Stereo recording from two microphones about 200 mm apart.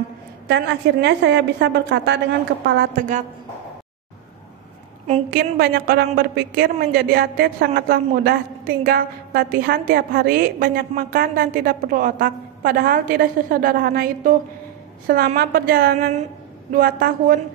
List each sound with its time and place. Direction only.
0.5 s a woman's voice: 60° right (ahead or behind)
3.0 s a woman's voice: 40° right (ahead or behind)
5.3 s a woman's voice: 50° right (ahead or behind)